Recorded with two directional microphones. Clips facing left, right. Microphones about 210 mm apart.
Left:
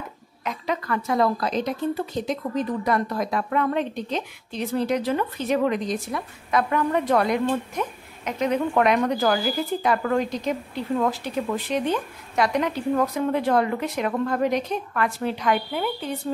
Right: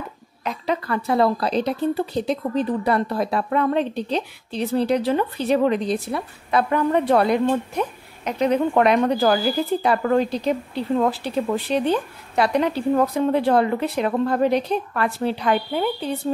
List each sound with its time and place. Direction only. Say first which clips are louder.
0.4 s a woman's voice: right 3 dB; 30° right (ahead or behind)